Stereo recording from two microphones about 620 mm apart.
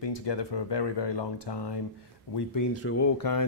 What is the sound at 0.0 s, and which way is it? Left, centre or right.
Speech, left.